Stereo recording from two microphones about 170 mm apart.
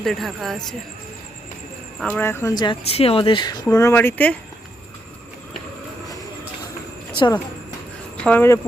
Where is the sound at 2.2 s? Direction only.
15° left (ahead or behind).